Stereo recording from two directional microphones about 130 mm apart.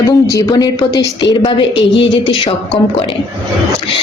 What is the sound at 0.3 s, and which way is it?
A woman's voice, 30° left (ahead or behind).